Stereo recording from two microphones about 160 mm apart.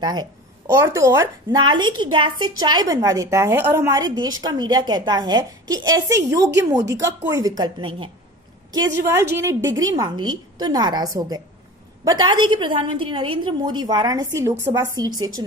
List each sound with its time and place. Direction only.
0.0 s speech: 25° right (ahead or behind)
9.0 s speech: 15° right (ahead or behind)